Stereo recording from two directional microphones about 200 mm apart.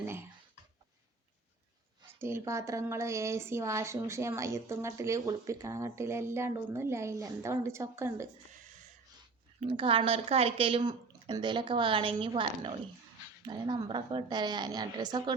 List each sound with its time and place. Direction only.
0.0 s a sound: 10° right (ahead or behind)
2.1 s speech: 15° right (ahead or behind)
9.6 s speech: 25° right (ahead or behind)